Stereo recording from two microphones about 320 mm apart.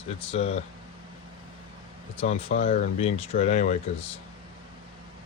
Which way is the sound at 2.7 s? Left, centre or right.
Left.